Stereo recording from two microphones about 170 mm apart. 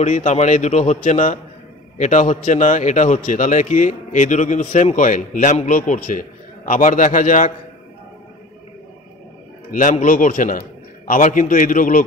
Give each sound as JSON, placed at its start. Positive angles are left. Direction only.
{"t": 0.0, "sound": "a man's voice", "side_deg": 45}
{"t": 9.7, "sound": "a man's voice", "side_deg": 45}